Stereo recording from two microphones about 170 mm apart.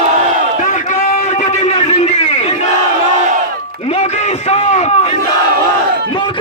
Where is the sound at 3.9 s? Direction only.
40° left (ahead or behind).